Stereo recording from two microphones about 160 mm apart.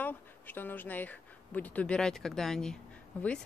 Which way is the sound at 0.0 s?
10° left (ahead or behind).